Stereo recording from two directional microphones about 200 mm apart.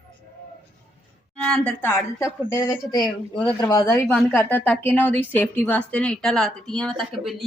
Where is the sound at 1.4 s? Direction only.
5° left (ahead or behind).